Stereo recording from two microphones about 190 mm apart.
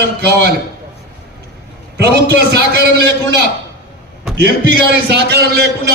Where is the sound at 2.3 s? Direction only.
60° right (ahead or behind).